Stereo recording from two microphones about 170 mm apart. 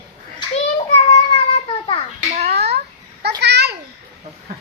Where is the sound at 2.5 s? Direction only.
70° right (ahead or behind).